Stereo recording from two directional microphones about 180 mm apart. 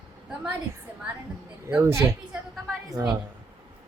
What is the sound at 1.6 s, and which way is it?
Speech, 15° right (ahead or behind).